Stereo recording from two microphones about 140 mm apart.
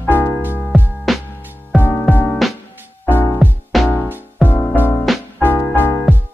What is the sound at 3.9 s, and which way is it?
Music, 15° left (ahead or behind).